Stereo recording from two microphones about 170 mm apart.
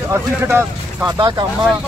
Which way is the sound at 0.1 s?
15° right (ahead or behind).